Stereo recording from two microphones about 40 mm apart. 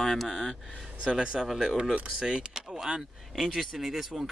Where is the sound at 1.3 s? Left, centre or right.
Centre.